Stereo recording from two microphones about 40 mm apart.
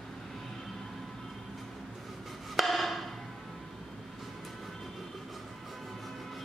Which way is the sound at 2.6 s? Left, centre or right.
Centre.